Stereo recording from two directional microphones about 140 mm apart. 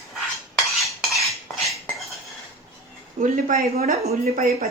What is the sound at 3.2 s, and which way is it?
Speech, 80° right.